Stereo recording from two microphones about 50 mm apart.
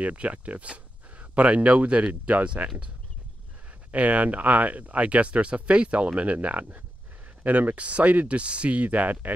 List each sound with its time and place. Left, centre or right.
0.0 s speech: right
3.9 s speech: right